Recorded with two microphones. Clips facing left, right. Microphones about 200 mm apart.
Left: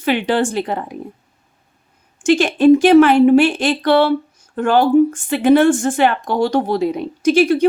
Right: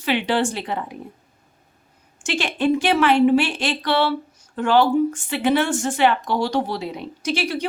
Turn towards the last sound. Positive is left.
turn(degrees=50)  # may be behind; listen again after turning